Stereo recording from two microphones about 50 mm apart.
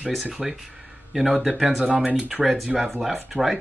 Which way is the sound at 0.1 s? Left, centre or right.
Centre.